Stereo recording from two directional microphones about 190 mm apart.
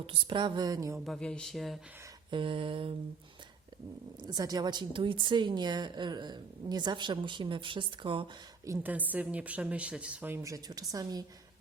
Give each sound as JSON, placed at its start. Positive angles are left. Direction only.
{"t": 0.0, "sound": "a woman's voice", "side_deg": -25}
{"t": 1.0, "sound": "speech", "side_deg": 5}
{"t": 2.3, "sound": "a woman's voice", "side_deg": -25}
{"t": 4.3, "sound": "a woman's voice", "side_deg": -20}
{"t": 8.6, "sound": "a woman's voice", "side_deg": -15}